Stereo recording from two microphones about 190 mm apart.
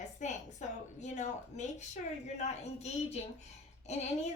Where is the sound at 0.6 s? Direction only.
40° left (ahead or behind).